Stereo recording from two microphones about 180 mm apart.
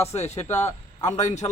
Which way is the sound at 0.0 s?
35° left (ahead or behind).